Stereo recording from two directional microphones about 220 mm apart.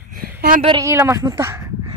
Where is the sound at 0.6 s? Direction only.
20° right (ahead or behind).